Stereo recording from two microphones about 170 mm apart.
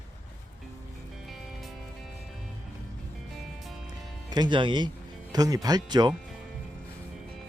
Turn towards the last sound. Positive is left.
turn(degrees=-25)  # may be behind; listen again after turning